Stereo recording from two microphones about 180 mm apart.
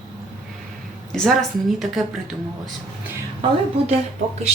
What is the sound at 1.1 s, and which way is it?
Speech, centre (ahead or behind).